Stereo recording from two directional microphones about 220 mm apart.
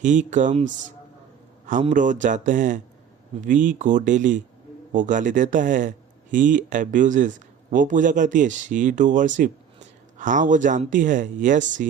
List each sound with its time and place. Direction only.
0.0 s speech: 35° right (ahead or behind)